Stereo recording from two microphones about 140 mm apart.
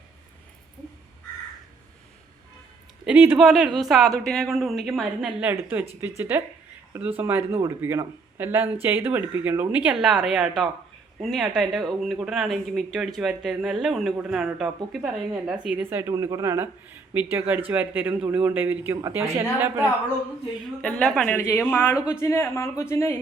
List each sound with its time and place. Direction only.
3.0 s speech: 10° right (ahead or behind)
3.3 s speech: centre (ahead or behind)
20.8 s speech: 5° left (ahead or behind)
21.3 s speech: 15° left (ahead or behind)